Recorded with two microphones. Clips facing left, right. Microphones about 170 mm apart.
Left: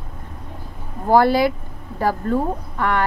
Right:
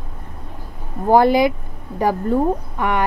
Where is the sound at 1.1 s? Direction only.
15° right (ahead or behind).